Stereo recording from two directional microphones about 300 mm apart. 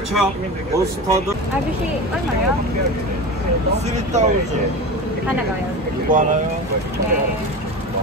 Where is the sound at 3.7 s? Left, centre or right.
Right.